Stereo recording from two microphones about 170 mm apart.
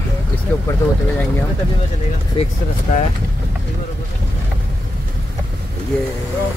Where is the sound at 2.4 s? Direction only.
35° left (ahead or behind).